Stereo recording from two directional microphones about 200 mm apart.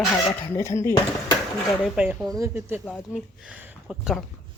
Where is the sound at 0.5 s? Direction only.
15° left (ahead or behind).